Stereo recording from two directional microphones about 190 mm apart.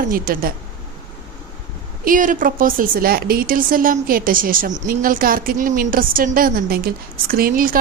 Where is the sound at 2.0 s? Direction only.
45° right (ahead or behind).